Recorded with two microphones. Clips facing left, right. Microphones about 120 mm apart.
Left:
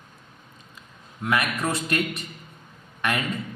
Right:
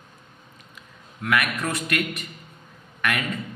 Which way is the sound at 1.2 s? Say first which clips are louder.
Even; 25° left (ahead or behind).